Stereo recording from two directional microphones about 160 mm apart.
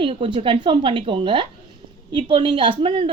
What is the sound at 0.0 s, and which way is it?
A woman's voice, 35° right (ahead or behind).